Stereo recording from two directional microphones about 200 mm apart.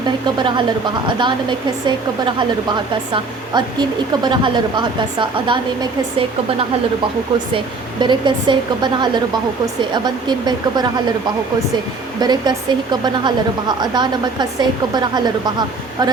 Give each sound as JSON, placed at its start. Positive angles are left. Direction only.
{"t": 0.3, "sound": "speech", "side_deg": -25}
{"t": 8.0, "sound": "speech", "side_deg": -25}
{"t": 12.2, "sound": "speech", "side_deg": -20}